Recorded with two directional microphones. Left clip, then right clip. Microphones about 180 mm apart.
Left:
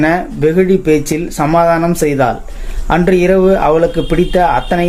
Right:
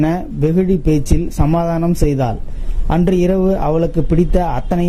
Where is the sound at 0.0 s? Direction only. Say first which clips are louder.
Left 6 dB; 40° right (ahead or behind).